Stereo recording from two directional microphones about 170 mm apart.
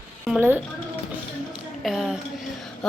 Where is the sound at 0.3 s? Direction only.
10° right (ahead or behind).